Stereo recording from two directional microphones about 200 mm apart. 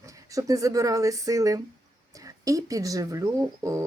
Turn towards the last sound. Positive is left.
turn(degrees=-15)  # may be behind; listen again after turning